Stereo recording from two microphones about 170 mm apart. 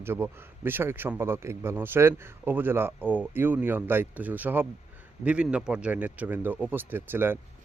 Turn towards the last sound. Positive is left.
turn(degrees=-10)  # may be behind; listen again after turning